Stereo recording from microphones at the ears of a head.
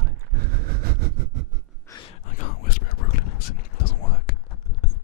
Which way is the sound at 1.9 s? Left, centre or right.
Left.